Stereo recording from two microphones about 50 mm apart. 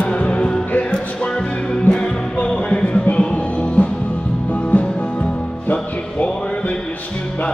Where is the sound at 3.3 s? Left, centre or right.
Left.